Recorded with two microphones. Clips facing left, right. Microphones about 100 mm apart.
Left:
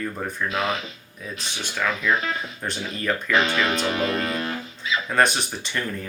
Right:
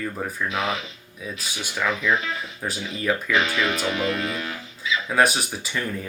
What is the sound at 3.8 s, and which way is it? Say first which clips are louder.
Speech: left 1 dB; 40° left (ahead or behind).